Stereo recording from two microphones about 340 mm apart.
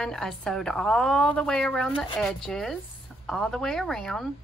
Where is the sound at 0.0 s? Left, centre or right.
Centre.